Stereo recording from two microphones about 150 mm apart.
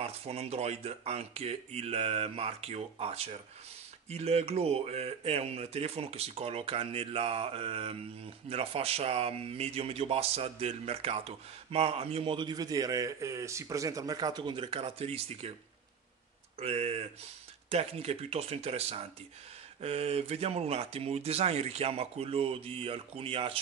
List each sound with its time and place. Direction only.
0.0 s speech: 45° right (ahead or behind)
16.5 s speech: 40° right (ahead or behind)